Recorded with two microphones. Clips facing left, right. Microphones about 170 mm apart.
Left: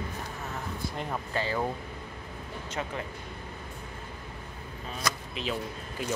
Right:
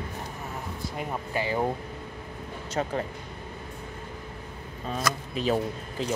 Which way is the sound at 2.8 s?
40° right (ahead or behind).